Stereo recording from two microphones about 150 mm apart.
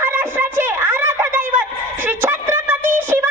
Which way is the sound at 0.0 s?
15° right (ahead or behind).